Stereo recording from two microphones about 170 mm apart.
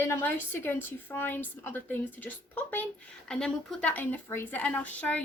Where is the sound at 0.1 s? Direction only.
10° left (ahead or behind).